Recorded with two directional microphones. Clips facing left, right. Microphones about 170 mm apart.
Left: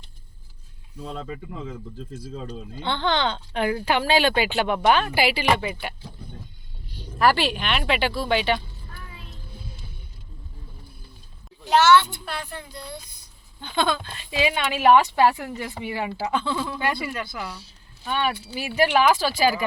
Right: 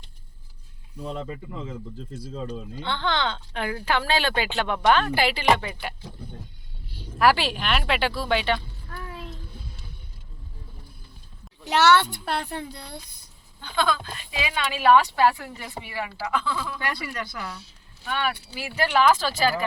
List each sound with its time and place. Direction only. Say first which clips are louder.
2.8 s speech: left 3 dB; 20° left (ahead or behind)
6.8 s speech: even; 10° right (ahead or behind)
11.6 s a child's voice: left 2 dB; 70° right (ahead or behind)
13.6 s speech: left 1 dB; 20° left (ahead or behind)
16.9 s speech: left 3 dB; 5° left (ahead or behind)
17.6 s speech: left 2 dB; 25° left (ahead or behind)